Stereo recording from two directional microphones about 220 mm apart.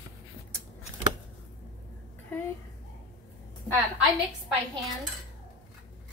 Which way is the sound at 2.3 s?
10° left (ahead or behind).